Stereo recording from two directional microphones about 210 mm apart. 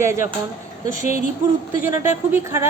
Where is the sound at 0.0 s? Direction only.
10° right (ahead or behind).